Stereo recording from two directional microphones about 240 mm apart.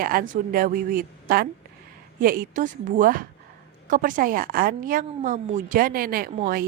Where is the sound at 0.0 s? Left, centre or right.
Right.